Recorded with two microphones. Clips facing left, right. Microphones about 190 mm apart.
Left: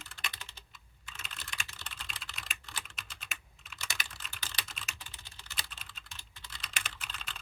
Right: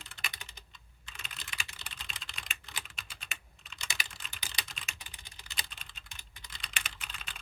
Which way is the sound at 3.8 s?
15° right (ahead or behind).